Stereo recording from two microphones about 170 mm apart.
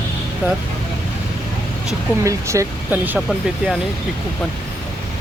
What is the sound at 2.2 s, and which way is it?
Speech, 20° right (ahead or behind).